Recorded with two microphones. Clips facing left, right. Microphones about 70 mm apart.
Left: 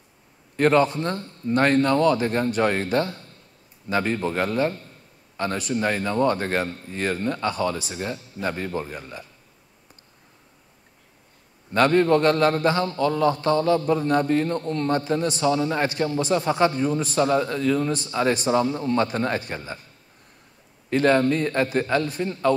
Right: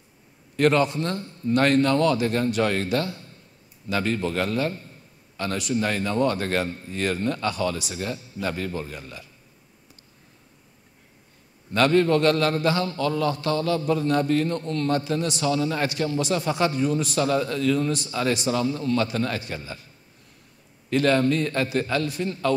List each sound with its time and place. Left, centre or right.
0.6 s a man's voice: left
7.9 s a man's voice: left
11.7 s a man's voice: left
15.4 s a man's voice: left
20.9 s a man's voice: left